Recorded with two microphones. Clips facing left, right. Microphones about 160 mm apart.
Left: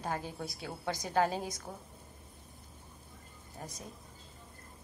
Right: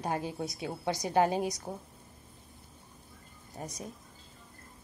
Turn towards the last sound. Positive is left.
turn(degrees=-20)  # may be behind; listen again after turning